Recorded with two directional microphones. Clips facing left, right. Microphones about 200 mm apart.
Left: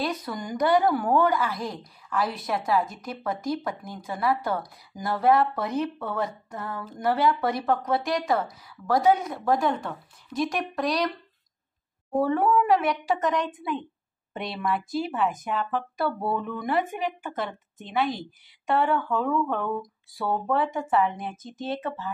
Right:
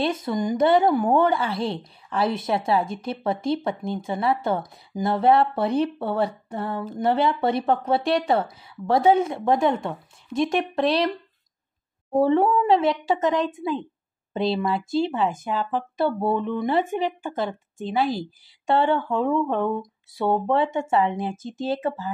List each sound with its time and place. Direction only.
0.0 s a woman's voice: 25° right (ahead or behind)
12.2 s a woman's voice: 25° right (ahead or behind)